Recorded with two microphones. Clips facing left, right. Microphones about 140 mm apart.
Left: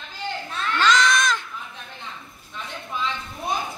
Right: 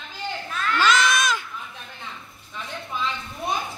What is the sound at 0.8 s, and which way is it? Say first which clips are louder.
Crowd: left 1 dB; 5° right (ahead or behind).